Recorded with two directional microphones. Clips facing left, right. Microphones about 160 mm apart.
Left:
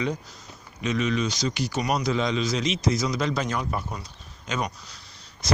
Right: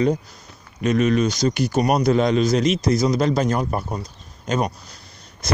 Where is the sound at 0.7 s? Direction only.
50° right (ahead or behind).